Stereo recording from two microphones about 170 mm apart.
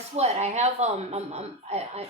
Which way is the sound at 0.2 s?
40° right (ahead or behind).